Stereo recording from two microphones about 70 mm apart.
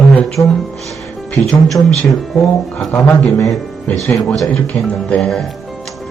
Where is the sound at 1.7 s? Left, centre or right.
Centre.